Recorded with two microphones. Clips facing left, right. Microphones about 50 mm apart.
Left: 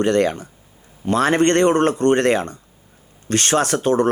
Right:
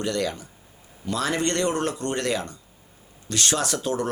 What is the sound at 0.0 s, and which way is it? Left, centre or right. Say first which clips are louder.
Speech: left 9 dB; left.